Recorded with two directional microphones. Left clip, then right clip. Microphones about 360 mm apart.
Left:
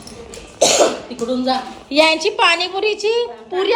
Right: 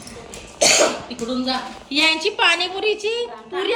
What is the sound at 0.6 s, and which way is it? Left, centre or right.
Speech, centre.